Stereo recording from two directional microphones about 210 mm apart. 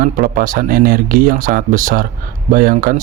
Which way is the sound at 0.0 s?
40° right (ahead or behind).